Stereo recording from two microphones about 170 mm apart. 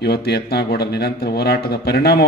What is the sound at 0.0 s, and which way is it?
Speech, 70° left (ahead or behind).